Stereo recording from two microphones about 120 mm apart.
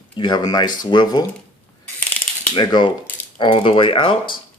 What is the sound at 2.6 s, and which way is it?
Speech, 40° left (ahead or behind).